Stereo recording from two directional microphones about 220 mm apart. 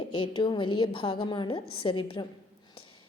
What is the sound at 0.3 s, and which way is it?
A woman's voice, 20° left (ahead or behind).